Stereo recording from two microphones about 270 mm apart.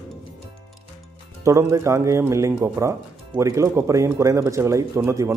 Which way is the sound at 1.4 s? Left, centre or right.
Centre.